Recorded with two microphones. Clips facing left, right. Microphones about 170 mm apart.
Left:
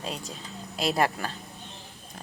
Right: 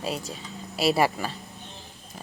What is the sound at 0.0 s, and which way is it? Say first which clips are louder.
Speech: right 4 dB; 5° right (ahead or behind).